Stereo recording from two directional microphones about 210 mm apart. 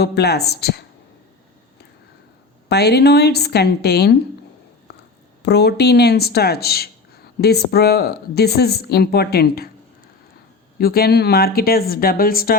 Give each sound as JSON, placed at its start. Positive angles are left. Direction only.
{"t": 0.0, "sound": "a woman's voice", "side_deg": 50}
{"t": 2.6, "sound": "a woman's voice", "side_deg": 50}
{"t": 5.4, "sound": "a woman's voice", "side_deg": 50}
{"t": 10.8, "sound": "a woman's voice", "side_deg": 45}